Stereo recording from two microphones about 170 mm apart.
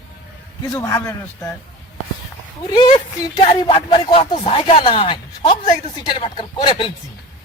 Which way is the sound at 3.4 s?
30° left (ahead or behind).